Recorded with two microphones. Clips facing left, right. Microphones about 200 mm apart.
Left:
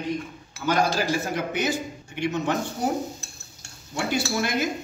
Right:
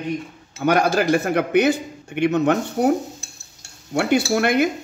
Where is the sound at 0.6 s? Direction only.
60° right (ahead or behind).